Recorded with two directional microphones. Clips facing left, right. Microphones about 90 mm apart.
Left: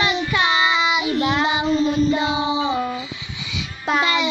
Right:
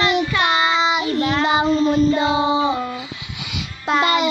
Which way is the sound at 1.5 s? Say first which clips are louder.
Right 3 dB; 45° right (ahead or behind).